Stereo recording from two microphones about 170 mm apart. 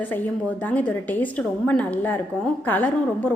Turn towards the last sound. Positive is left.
turn(degrees=10)  # may be behind; listen again after turning